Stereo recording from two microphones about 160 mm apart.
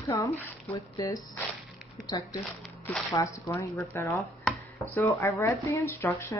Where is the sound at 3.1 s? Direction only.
20° left (ahead or behind).